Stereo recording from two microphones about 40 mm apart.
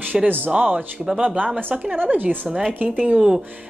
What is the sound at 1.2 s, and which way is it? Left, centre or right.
Speech, right.